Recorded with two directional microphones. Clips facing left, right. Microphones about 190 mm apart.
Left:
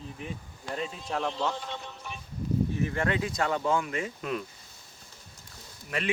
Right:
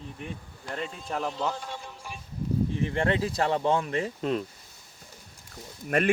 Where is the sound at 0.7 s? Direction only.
5° left (ahead or behind).